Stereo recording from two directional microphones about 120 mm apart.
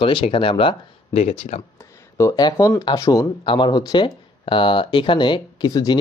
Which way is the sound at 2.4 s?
30° left (ahead or behind).